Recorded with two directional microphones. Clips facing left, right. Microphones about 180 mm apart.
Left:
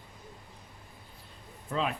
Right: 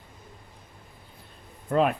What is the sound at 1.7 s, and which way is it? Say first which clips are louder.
Speech: right 9 dB; 55° right (ahead or behind).